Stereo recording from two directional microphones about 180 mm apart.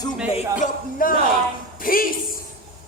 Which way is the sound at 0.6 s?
50° left (ahead or behind).